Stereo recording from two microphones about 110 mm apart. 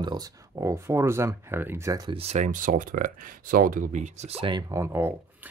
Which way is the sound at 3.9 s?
90° right.